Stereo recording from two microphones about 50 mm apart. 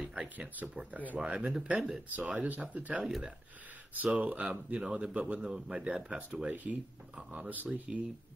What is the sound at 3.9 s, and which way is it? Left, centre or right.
Speech, right.